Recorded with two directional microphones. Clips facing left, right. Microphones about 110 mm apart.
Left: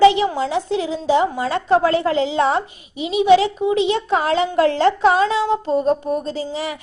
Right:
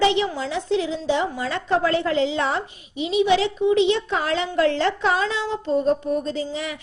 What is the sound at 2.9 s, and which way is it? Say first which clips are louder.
Speech: left 1 dB; 5° left (ahead or behind).